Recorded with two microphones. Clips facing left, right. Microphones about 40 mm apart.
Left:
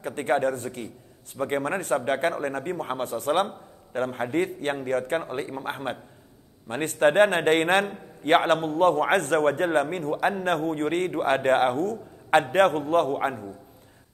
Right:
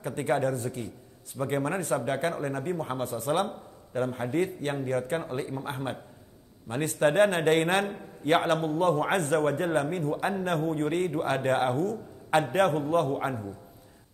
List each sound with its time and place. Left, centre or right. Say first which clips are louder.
0.0 s a man's voice: left 3 dB; left